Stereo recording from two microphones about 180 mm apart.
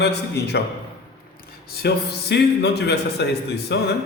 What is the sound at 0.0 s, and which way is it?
Speech, 70° left (ahead or behind).